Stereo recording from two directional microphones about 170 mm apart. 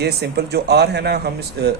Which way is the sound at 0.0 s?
75° right (ahead or behind).